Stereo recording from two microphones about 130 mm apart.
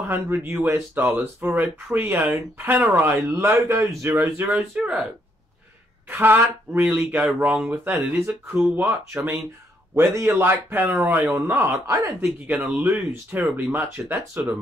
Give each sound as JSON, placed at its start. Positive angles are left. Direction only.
{"t": 0.1, "sound": "speech", "side_deg": -15}
{"t": 6.0, "sound": "speech", "side_deg": -15}